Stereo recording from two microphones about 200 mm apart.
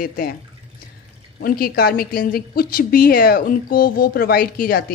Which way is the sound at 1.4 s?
50° left (ahead or behind).